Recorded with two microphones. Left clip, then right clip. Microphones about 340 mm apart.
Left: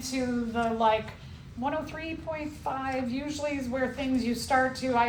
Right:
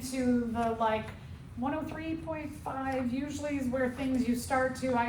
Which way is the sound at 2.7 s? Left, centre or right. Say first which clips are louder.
Left 3 dB; left.